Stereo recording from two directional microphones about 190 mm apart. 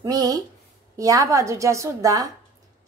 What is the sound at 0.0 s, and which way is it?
A woman's voice, 20° right (ahead or behind).